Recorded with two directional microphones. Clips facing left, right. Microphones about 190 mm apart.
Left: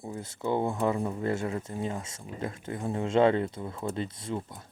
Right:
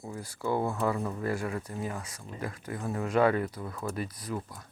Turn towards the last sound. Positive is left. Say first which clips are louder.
# left 2 dB
turn(degrees=25)  # may be behind; listen again after turning